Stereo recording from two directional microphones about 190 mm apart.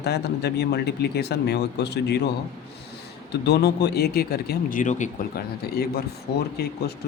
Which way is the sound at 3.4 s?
60° left (ahead or behind).